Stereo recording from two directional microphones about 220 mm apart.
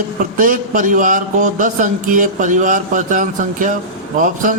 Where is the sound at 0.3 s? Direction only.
40° right (ahead or behind).